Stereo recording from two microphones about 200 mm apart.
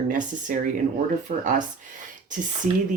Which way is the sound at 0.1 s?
40° right (ahead or behind).